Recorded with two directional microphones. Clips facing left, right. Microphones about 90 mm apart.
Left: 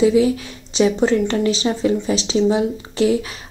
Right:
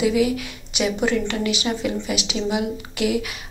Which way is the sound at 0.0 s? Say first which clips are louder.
Left 5 dB; 30° left (ahead or behind).